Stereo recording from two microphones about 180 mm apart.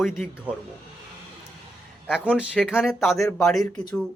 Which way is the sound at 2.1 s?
5° right (ahead or behind).